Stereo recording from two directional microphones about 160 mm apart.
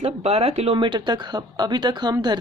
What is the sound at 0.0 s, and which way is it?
Speech, 40° right (ahead or behind).